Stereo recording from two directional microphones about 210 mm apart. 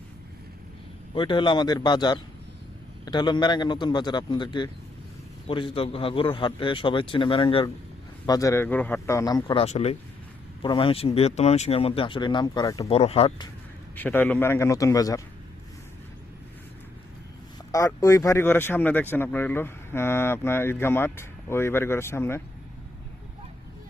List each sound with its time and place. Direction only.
1.1 s speech: 20° left (ahead or behind)
12.9 s speech: 30° left (ahead or behind)
13.9 s speech: 10° left (ahead or behind)
17.7 s speech: 15° left (ahead or behind)